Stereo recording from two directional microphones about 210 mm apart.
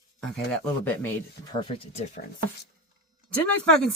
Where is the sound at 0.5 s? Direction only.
10° left (ahead or behind).